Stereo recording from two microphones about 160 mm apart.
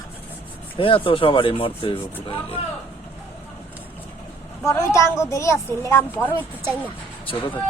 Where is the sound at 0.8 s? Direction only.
35° left (ahead or behind).